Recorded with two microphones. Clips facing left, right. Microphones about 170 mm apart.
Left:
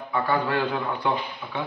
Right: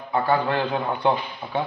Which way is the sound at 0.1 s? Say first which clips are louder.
Right 3 dB; 35° right (ahead or behind).